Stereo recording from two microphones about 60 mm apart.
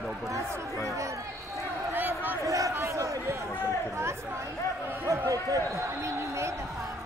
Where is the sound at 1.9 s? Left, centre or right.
Right.